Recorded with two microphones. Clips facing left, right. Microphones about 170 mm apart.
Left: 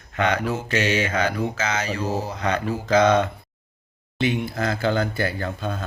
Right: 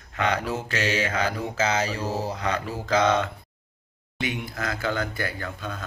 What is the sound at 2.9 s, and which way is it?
Speech, 20° left (ahead or behind).